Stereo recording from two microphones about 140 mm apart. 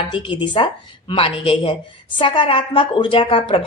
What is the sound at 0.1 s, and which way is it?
A woman's voice, 35° left (ahead or behind).